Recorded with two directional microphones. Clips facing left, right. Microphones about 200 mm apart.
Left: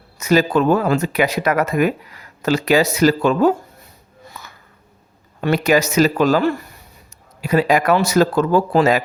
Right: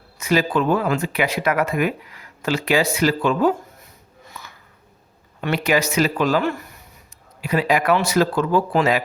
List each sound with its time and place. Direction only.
0.2 s speech: 40° left (ahead or behind)
4.3 s a sound: 40° left (ahead or behind)
5.4 s speech: 40° left (ahead or behind)